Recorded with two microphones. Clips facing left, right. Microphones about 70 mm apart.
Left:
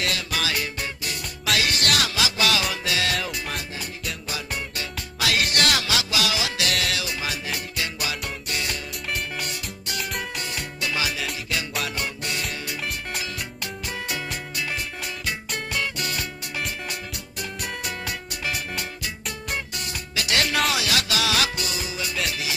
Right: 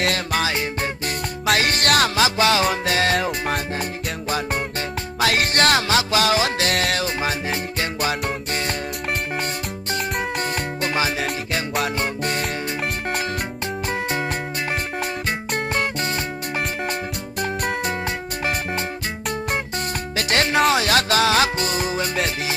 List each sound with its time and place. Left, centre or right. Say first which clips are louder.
0.0 s music: right 5 dB; right
1.0 s music: right 6 dB; right
9.9 s music: right 6 dB; right
13.9 s music: right 7 dB; right
15.3 s music: right 4 dB; right
17.4 s music: right 9 dB; right
20.1 s music: right 4 dB; right